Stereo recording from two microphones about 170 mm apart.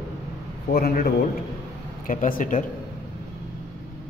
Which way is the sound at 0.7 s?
60° left (ahead or behind).